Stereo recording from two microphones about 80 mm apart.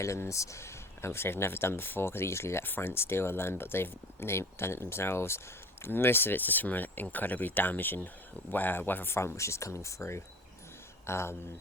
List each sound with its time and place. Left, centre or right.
0.0 s speech: left